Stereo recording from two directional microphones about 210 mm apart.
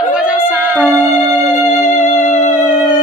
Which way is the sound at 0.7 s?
Centre (ahead or behind).